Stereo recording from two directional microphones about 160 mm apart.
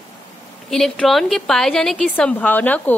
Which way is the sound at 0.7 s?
5° left (ahead or behind).